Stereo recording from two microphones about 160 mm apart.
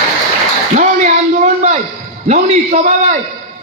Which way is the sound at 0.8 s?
50° right (ahead or behind).